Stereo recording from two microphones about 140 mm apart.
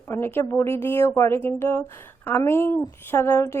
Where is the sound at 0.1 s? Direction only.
15° left (ahead or behind).